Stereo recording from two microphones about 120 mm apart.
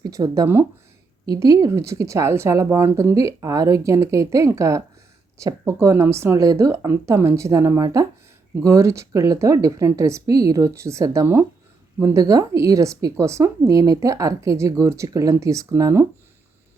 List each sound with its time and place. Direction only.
0.0 s speech: 30° right (ahead or behind)